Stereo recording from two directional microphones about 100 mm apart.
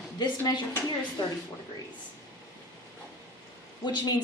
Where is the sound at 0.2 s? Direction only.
45° left (ahead or behind).